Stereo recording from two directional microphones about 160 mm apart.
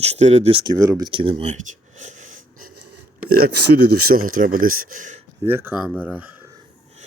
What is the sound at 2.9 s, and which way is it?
Speech, 80° right.